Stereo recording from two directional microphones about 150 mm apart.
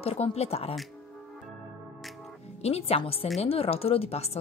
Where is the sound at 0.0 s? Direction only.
40° left (ahead or behind).